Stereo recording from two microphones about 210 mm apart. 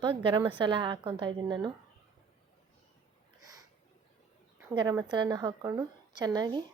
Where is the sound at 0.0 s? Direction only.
25° right (ahead or behind).